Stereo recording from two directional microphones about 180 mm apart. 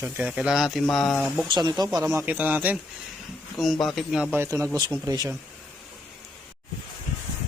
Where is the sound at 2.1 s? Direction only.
10° right (ahead or behind).